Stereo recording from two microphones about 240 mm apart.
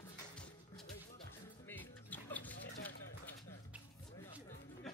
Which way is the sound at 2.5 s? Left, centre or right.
Left.